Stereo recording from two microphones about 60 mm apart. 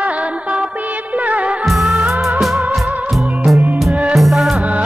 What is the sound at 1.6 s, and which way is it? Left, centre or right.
Music, centre.